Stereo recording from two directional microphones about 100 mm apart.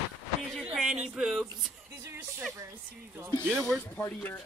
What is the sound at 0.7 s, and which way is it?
Speech, 5° right (ahead or behind).